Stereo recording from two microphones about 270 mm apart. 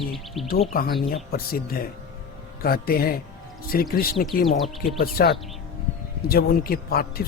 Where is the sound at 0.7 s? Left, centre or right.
Left.